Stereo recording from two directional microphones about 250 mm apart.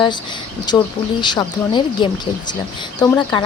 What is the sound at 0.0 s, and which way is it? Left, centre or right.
Speech, centre.